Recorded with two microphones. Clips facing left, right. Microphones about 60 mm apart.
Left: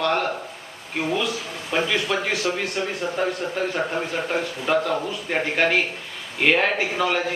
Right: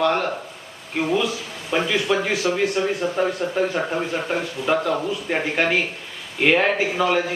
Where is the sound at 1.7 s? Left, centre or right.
Centre.